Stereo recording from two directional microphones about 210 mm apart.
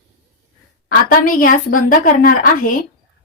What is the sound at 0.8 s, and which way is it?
A woman's voice, 45° left (ahead or behind).